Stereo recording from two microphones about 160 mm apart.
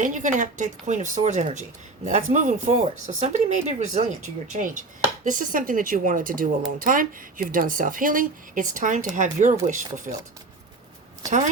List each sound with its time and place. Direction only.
0.0 s speech: 50° right (ahead or behind)